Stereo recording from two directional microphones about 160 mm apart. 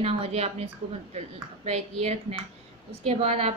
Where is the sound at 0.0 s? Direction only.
40° right (ahead or behind).